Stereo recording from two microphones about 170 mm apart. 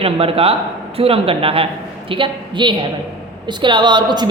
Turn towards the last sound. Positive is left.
turn(degrees=-25)  # may be behind; listen again after turning